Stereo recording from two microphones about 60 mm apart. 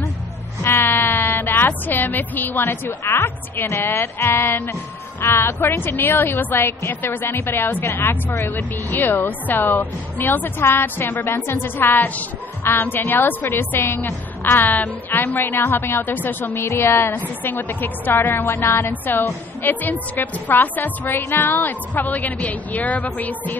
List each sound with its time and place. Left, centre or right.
0.7 s music: left
3.1 s a woman's voice: left
16.5 s a woman's voice: left
17.1 s speech: left
18.9 s a woman's voice: left